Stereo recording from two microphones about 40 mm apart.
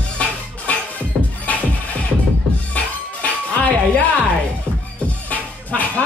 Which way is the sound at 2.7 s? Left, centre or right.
Left.